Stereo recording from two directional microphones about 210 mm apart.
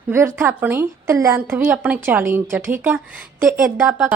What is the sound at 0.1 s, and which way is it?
A woman's voice, 10° right (ahead or behind).